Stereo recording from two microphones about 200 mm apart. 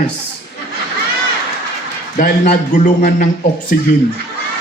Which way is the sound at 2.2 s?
45° left (ahead or behind).